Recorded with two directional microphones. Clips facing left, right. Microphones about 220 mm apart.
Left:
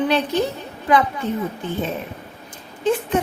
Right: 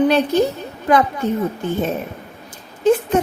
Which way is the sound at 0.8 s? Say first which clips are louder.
Right 2 dB; 45° right (ahead or behind).